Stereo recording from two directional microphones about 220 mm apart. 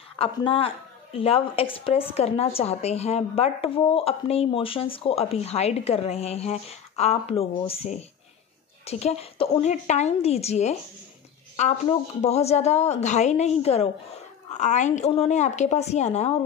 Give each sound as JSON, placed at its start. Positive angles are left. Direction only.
{"t": 0.2, "sound": "a woman's voice", "side_deg": 25}